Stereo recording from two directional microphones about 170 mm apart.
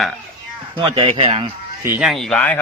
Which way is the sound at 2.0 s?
Centre (ahead or behind).